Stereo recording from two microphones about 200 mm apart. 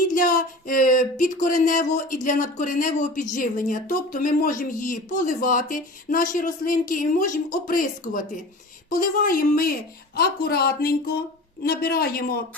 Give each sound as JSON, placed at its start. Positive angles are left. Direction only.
{"t": 0.1, "sound": "speech", "side_deg": 40}